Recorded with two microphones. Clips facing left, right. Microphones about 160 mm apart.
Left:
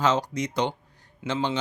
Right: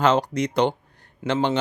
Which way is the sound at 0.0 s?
60° right (ahead or behind).